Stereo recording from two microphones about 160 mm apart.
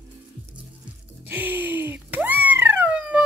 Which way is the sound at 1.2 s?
10° right (ahead or behind).